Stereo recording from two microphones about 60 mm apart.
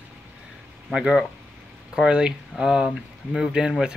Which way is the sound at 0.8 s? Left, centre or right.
Centre.